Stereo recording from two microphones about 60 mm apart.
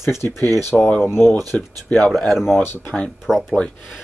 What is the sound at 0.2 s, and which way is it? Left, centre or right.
Speech, left.